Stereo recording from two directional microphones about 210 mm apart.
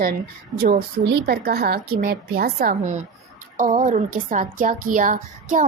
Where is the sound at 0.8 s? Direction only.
50° right (ahead or behind).